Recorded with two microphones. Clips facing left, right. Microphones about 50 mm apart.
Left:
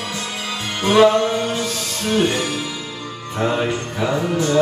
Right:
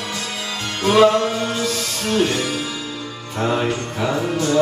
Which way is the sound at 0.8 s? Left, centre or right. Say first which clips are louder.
Left 1 dB; left.